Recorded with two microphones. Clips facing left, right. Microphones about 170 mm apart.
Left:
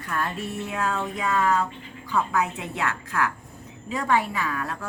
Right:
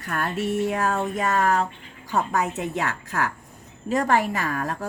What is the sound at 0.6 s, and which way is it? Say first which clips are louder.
A woman's voice: right 4 dB; 45° right (ahead or behind).